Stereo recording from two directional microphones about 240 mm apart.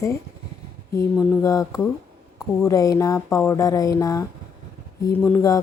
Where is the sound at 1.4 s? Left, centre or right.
Centre.